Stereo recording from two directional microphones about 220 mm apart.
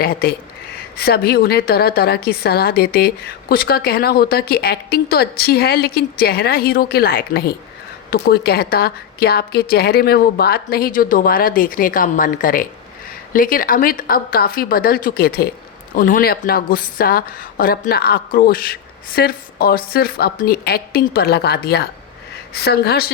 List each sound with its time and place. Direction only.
0.0 s a woman's voice: 45° left (ahead or behind)